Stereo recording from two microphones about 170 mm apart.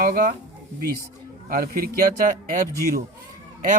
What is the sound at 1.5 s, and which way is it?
Speech, 55° right (ahead or behind).